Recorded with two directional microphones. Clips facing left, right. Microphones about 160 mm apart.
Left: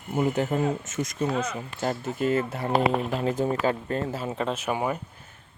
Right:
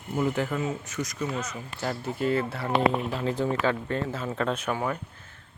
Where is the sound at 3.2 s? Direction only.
45° left (ahead or behind).